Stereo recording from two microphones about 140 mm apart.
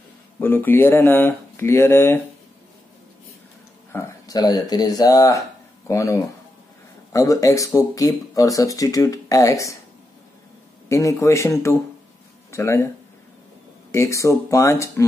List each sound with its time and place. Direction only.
0.4 s speech: 15° left (ahead or behind)
3.9 s speech: 20° left (ahead or behind)
10.9 s speech: 20° left (ahead or behind)
13.9 s speech: 20° left (ahead or behind)